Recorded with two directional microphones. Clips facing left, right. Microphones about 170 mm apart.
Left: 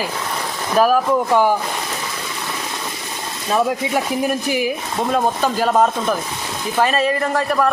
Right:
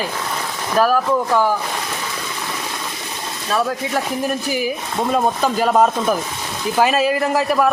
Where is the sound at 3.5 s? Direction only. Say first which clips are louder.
Left 2 dB; 15° left (ahead or behind).